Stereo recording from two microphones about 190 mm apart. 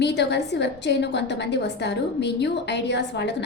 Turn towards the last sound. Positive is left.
turn(degrees=65)  # may be behind; listen again after turning